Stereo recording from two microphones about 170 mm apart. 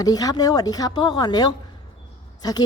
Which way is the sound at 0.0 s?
20° left (ahead or behind).